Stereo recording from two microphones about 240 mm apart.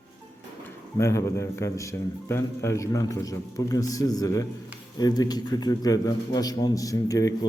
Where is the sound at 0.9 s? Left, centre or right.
Centre.